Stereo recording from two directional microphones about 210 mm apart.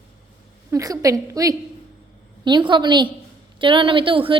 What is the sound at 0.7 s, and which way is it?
A woman's voice, 15° right (ahead or behind).